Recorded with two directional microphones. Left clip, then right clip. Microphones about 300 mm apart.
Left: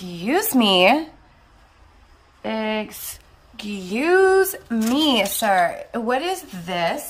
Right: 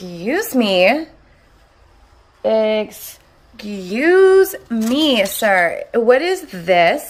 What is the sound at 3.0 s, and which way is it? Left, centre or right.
Speech, centre.